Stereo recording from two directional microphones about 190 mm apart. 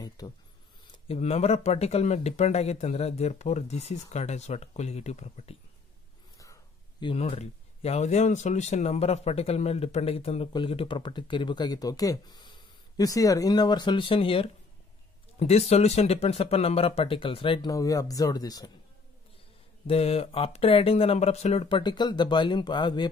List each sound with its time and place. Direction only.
0.2 s speech: 20° left (ahead or behind)
0.9 s speech: 30° left (ahead or behind)
6.3 s speech: 15° left (ahead or behind)
19.9 s speech: 30° left (ahead or behind)